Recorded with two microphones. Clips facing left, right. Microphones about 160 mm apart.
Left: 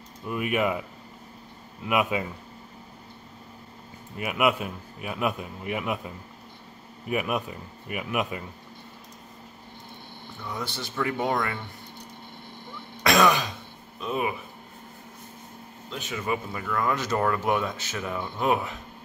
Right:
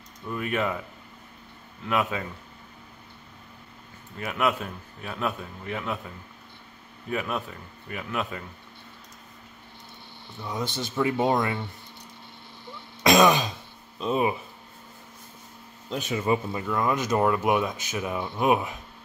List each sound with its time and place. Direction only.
0.3 s a man's voice: 10° left (ahead or behind)
1.9 s a man's voice: 15° left (ahead or behind)
4.2 s a man's voice: 10° left (ahead or behind)
10.5 s speech: 20° right (ahead or behind)
13.0 s throat clearing: 20° right (ahead or behind)
13.9 s speech: 25° right (ahead or behind)
15.9 s speech: 30° right (ahead or behind)